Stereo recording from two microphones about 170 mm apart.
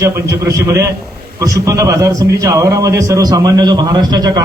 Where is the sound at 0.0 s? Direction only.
15° right (ahead or behind).